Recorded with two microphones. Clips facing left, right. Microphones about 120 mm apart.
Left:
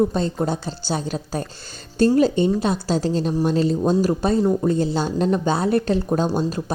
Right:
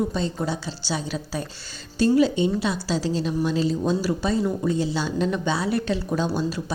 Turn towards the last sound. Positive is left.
turn(degrees=45)  # may be behind; listen again after turning